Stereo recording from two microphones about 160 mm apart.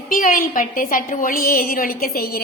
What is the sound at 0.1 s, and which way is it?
A woman's voice, 60° left (ahead or behind).